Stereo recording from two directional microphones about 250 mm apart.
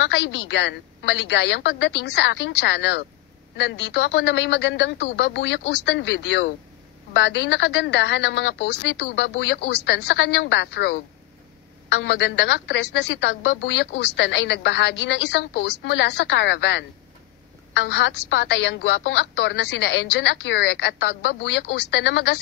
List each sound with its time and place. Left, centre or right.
0.1 s a woman's voice: left